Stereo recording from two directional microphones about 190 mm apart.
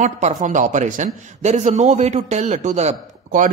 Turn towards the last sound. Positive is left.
turn(degrees=-40)  # may be behind; listen again after turning